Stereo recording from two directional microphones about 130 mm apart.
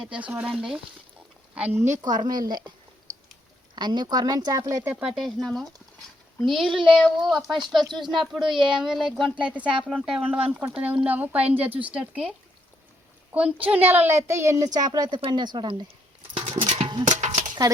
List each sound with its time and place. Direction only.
0.0 s a woman's voice: 10° right (ahead or behind); by 2.6 s 30° right (ahead or behind)
3.8 s speech: 35° right (ahead or behind)
4.8 s speech: 10° right (ahead or behind)
8.4 s speech: 40° right (ahead or behind)
8.8 s a woman's voice: 5° right (ahead or behind)
13.3 s a woman's voice: 10° right (ahead or behind); by 15.9 s 35° right (ahead or behind)
16.5 s music: 50° right (ahead or behind)
17.1 s a sound: 60° right (ahead or behind)